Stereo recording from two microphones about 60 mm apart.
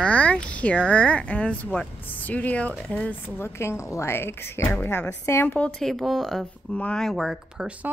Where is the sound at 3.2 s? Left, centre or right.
Left.